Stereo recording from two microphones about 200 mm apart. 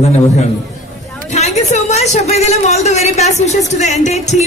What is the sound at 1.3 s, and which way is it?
Speech, 35° left (ahead or behind).